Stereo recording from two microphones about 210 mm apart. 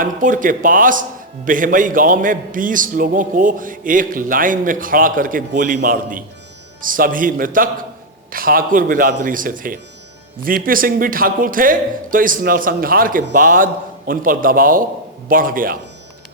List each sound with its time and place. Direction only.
0.0 s a man's voice: 40° right (ahead or behind)